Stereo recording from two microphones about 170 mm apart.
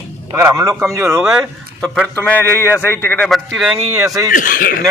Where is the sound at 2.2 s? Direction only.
10° left (ahead or behind).